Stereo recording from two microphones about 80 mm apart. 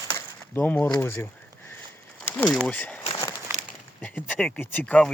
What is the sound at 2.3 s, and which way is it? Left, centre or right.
Speech, centre.